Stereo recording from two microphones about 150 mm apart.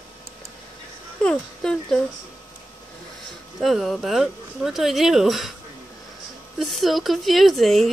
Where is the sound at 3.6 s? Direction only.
Centre (ahead or behind).